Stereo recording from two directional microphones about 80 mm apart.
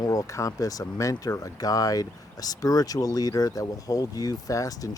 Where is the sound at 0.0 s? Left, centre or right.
Left.